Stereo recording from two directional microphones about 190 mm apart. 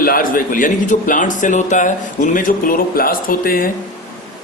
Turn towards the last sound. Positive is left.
turn(degrees=50)  # may be behind; listen again after turning